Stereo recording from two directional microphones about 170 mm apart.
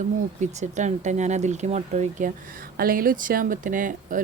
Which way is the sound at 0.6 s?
45° right (ahead or behind).